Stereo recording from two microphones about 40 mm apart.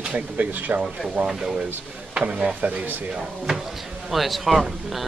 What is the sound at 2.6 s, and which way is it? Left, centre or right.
Speech, right.